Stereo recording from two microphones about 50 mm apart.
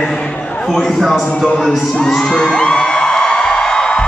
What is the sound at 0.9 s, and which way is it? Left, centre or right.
Speech, centre.